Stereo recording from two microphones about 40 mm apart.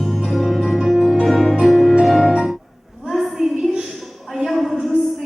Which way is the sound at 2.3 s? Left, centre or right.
Centre.